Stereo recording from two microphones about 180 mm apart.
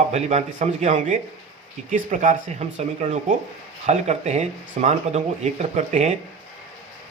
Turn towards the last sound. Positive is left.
turn(degrees=-40)  # may be behind; listen again after turning